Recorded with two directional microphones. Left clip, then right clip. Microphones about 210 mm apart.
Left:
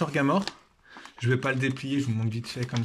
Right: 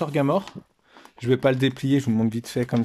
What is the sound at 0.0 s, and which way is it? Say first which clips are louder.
Speech: right 3 dB; 20° right (ahead or behind).